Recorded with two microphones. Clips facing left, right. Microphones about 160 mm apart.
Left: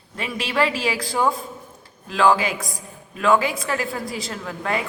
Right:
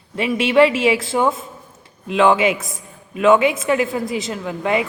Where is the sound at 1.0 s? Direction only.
Centre (ahead or behind).